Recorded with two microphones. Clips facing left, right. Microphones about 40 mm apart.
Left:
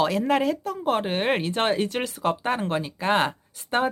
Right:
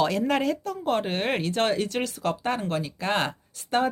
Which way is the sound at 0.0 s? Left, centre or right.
Centre.